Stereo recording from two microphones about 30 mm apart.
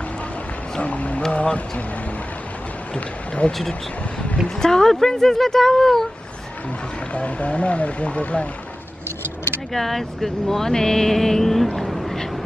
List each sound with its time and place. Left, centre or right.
0.8 s speech: left
3.4 s speech: left
4.6 s speech: centre
7.2 s speech: left
9.8 s speech: centre
11.9 s a sound: centre